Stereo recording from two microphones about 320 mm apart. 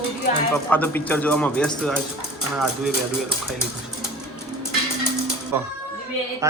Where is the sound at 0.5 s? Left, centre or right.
Centre.